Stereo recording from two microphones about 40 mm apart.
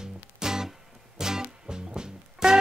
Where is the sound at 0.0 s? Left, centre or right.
Centre.